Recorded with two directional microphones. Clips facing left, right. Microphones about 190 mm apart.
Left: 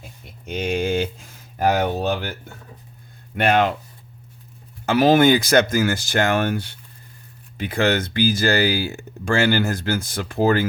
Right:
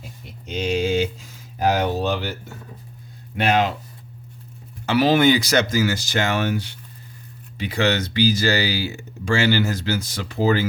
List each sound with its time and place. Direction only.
0.4 s speech: 55° left (ahead or behind)
3.3 s speech: 55° left (ahead or behind)
4.9 s speech: 50° left (ahead or behind)